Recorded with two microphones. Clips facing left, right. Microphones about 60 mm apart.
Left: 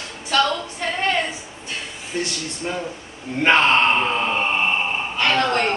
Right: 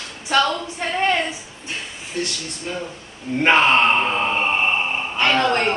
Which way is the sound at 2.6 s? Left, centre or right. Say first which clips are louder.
Left 2 dB; left.